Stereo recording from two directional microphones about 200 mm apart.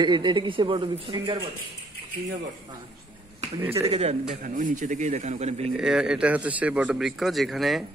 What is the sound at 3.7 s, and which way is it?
A man's voice, 30° right (ahead or behind).